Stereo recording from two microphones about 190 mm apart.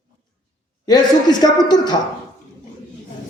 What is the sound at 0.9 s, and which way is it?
A man's voice, 20° left (ahead or behind).